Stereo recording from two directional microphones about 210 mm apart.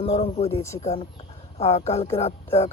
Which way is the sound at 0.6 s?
15° left (ahead or behind).